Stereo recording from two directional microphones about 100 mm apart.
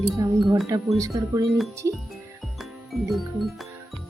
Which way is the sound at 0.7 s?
40° right (ahead or behind).